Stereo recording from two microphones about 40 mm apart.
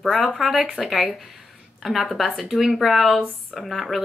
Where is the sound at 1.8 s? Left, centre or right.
Centre.